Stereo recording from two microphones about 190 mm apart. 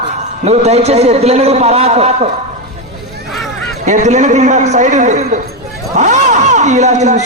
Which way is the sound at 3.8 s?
40° right (ahead or behind).